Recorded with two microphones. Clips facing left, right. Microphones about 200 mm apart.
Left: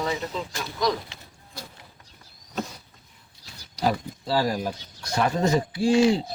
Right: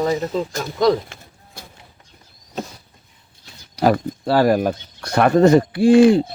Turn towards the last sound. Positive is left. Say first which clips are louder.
# right 8 dB
turn(degrees=-55)  # may be behind; listen again after turning